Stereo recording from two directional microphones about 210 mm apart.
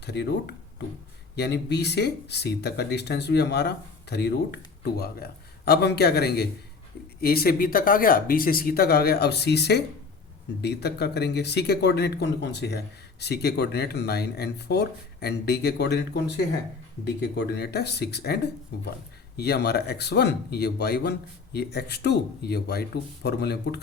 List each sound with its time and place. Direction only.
0.0 s speech: 55° left (ahead or behind)